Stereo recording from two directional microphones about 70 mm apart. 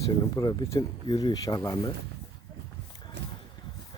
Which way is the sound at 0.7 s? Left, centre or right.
Left.